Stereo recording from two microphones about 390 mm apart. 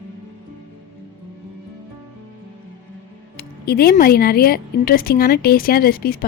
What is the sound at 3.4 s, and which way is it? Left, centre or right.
Speech, left.